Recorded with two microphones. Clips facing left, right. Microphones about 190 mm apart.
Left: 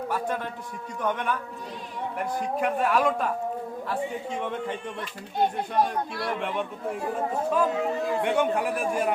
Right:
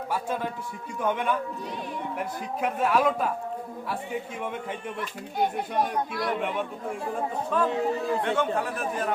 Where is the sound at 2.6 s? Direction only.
Centre (ahead or behind).